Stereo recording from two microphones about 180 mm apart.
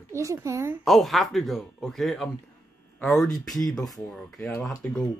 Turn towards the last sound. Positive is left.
turn(degrees=5)  # may be behind; listen again after turning